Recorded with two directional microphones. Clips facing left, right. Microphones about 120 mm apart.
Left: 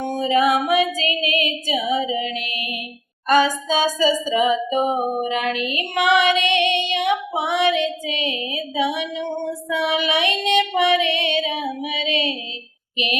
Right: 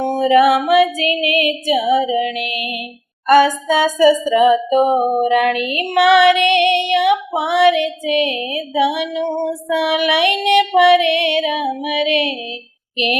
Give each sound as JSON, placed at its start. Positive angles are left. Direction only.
{"t": 0.0, "sound": "music", "side_deg": -55}